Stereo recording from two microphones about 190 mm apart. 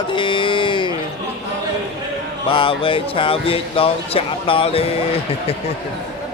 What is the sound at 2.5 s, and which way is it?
Speech, 25° left (ahead or behind).